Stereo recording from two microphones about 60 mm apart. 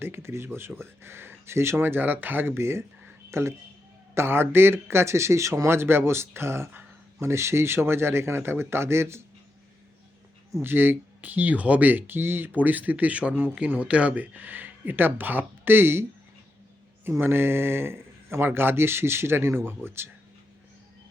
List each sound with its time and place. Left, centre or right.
0.0 s speech: right
10.6 s speech: right
17.1 s speech: right